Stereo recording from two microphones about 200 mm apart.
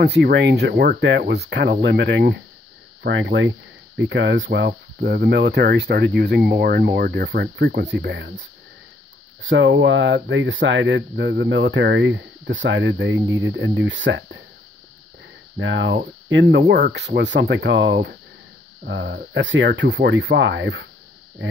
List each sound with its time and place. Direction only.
0.0 s speech: 55° right (ahead or behind)
9.4 s speech: 70° right (ahead or behind)
15.6 s speech: 65° right (ahead or behind)